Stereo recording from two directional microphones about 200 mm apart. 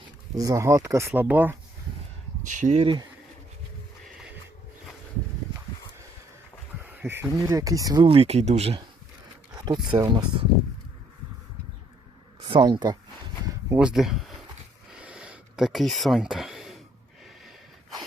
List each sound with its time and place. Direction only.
0.3 s speech: 15° right (ahead or behind)
2.4 s speech: 40° right (ahead or behind)
4.0 s a sound: 5° right (ahead or behind)
6.8 s speech: 5° right (ahead or behind); by 10.4 s 20° right (ahead or behind)
12.4 s speech: 25° right (ahead or behind)
13.7 s speech: 5° right (ahead or behind)
15.0 s a sound: 5° right (ahead or behind)